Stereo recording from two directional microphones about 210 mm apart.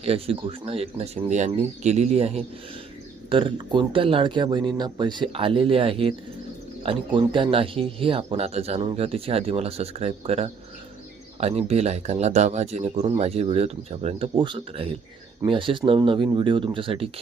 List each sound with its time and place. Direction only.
0.0 s speech: 25° right (ahead or behind)